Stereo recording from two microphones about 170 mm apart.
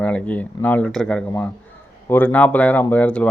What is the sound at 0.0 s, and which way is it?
A man's voice, 10° left (ahead or behind).